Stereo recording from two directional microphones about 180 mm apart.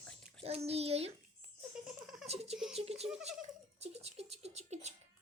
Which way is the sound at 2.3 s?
35° right (ahead or behind).